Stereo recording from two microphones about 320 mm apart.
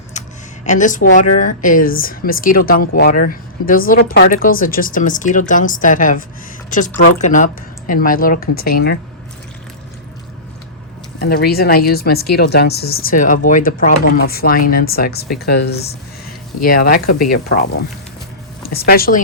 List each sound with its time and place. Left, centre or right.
0.1 s a sound: left
1.1 s speech: left
11.2 s speech: left
18.7 s speech: left